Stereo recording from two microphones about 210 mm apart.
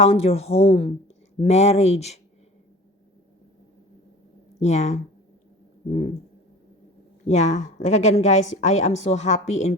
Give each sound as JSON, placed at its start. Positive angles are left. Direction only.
{"t": 0.0, "sound": "a woman's voice", "side_deg": 30}
{"t": 4.6, "sound": "a woman's voice", "side_deg": 30}
{"t": 7.3, "sound": "a woman's voice", "side_deg": 35}